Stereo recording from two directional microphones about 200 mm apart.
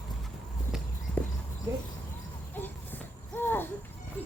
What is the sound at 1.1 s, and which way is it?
Horse, 5° left (ahead or behind).